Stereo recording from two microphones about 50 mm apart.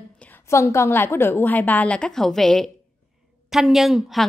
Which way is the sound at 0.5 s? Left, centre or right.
Left.